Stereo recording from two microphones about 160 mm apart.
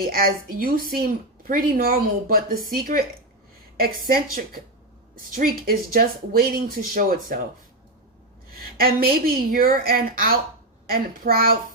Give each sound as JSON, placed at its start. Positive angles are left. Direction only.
{"t": 0.0, "sound": "a woman's voice", "side_deg": -65}
{"t": 8.8, "sound": "a woman's voice", "side_deg": -70}